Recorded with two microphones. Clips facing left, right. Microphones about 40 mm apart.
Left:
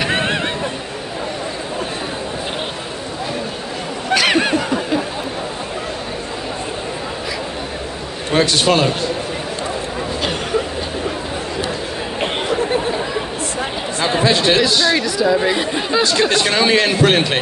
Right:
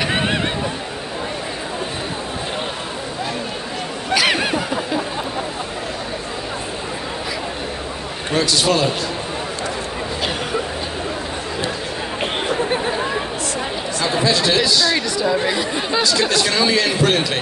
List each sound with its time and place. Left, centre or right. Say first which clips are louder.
0.0 s a sound: left 1 dB; centre
4.1 s a sound: left 3 dB; centre
8.4 s a man's voice: left 3 dB; left
14.0 s speech: left 3 dB; left
15.0 s a woman's voice: left 3 dB; centre
16.0 s speech: left 2 dB; left